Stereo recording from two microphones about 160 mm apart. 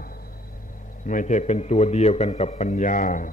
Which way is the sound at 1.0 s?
50° left (ahead or behind).